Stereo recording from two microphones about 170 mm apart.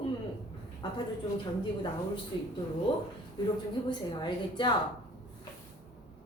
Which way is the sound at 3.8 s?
25° left (ahead or behind).